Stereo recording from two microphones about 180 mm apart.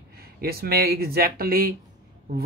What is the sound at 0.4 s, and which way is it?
Speech, 60° right (ahead or behind).